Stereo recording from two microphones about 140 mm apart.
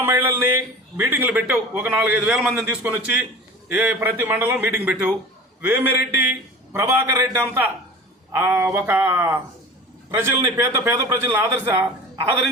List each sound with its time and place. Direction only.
0.0 s a man's voice: 15° right (ahead or behind)